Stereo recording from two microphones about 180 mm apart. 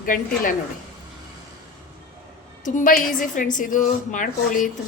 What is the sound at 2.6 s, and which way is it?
A woman's voice, 45° left (ahead or behind).